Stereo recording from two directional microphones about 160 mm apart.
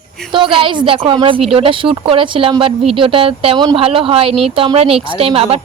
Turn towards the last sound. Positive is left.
turn(degrees=-35)  # may be behind; listen again after turning